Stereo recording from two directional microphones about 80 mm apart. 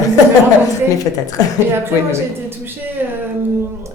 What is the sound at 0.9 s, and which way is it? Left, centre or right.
Speech, left.